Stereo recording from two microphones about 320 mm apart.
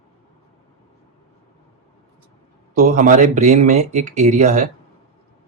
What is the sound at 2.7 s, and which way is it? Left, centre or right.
Speech, right.